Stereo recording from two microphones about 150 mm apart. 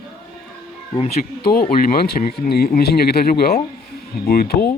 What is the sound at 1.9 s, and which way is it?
Speech, 85° left.